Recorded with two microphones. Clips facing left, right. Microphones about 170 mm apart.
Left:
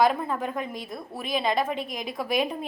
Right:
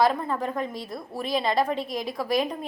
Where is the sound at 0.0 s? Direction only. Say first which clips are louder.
Even; 5° left (ahead or behind).